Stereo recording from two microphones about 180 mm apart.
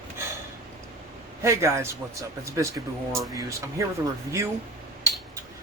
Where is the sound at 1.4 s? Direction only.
15° right (ahead or behind).